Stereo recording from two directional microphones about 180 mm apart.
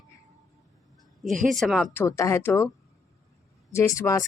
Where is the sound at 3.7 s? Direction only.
15° left (ahead or behind).